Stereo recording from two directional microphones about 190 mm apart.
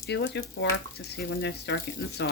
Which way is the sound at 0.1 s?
65° left (ahead or behind).